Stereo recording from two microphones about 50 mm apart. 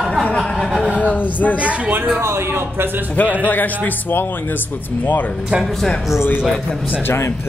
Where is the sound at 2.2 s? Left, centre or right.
Right.